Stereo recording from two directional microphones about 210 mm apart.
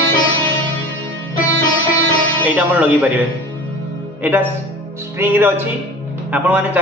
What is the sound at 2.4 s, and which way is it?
Speech, 10° right (ahead or behind).